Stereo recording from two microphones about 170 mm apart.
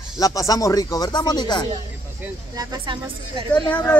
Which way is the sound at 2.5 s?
20° right (ahead or behind).